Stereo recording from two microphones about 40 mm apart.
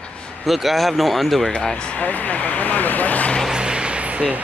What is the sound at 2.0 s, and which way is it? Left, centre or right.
Vehicle, left.